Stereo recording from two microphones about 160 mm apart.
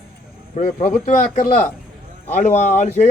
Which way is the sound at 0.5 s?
60° left (ahead or behind).